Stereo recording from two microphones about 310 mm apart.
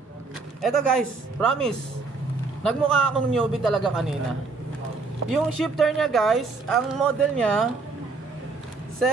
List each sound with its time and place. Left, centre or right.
0.6 s speech: centre
5.3 s speech: centre